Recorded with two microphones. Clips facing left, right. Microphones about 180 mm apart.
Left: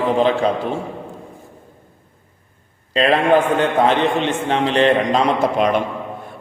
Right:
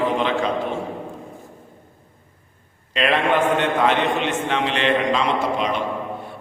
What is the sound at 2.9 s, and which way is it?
A man's voice, 35° left (ahead or behind).